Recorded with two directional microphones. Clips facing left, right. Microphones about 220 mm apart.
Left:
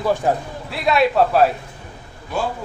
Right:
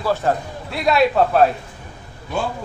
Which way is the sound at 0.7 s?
Centre (ahead or behind).